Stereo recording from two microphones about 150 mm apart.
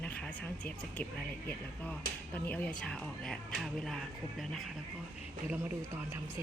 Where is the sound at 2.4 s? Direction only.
10° left (ahead or behind).